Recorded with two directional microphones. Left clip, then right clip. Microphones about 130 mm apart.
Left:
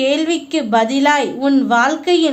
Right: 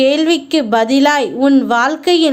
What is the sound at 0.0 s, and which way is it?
A woman's voice, 40° right (ahead or behind).